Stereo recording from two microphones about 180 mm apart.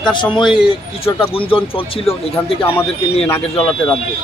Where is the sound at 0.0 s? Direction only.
25° left (ahead or behind).